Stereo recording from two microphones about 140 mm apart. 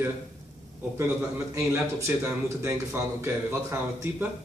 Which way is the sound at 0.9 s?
20° right (ahead or behind).